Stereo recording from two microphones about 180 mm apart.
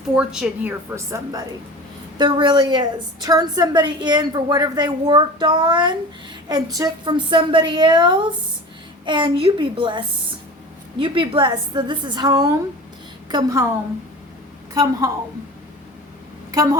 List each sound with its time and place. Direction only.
0.2 s a woman's voice: 5° right (ahead or behind); by 10.0 s 25° right (ahead or behind)
11.0 s a woman's voice: 30° right (ahead or behind)
14.7 s a woman's voice: 20° right (ahead or behind)
16.5 s speech: 20° right (ahead or behind)